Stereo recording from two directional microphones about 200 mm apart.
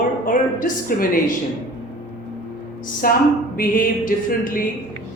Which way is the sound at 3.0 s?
45° left (ahead or behind).